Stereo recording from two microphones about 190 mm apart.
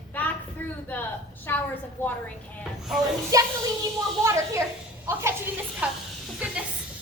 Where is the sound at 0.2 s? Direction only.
10° left (ahead or behind).